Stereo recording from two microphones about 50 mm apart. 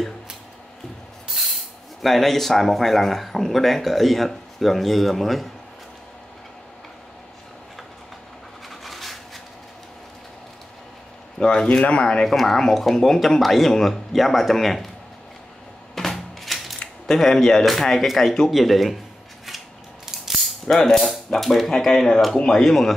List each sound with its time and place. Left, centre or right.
2.0 s speech: centre
8.6 s a sound: centre
11.3 s a man's voice: centre
12.3 s a man's voice: centre
15.9 s a sound: centre
17.0 s a man's voice: centre
20.6 s a man's voice: centre